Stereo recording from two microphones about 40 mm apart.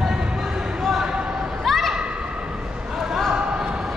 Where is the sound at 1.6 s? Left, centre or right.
Centre.